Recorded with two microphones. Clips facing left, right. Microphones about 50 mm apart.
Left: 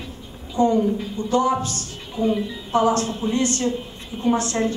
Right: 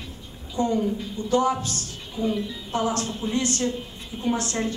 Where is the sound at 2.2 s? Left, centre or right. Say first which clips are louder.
Left 4 dB; centre.